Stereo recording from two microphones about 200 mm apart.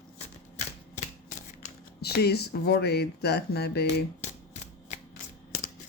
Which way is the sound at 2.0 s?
55° left (ahead or behind).